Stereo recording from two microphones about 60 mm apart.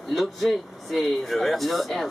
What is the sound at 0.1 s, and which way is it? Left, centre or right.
Speech, centre.